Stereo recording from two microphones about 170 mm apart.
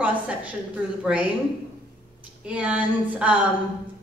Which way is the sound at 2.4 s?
5° right (ahead or behind).